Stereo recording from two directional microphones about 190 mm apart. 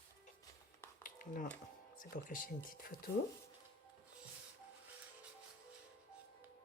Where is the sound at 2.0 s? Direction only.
45° left (ahead or behind).